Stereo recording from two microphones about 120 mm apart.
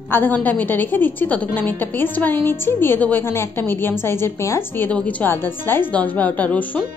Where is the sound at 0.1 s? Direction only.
15° left (ahead or behind).